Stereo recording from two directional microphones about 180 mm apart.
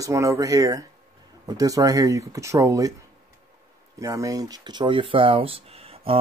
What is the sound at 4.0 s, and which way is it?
Speech, 20° right (ahead or behind).